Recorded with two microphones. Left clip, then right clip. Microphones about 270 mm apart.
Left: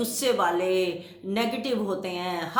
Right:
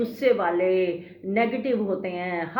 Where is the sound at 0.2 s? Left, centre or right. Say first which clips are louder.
Right 2 dB; centre.